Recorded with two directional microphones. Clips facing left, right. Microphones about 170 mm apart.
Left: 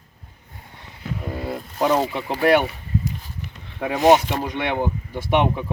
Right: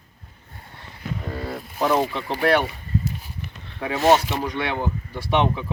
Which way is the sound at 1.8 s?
15° left (ahead or behind).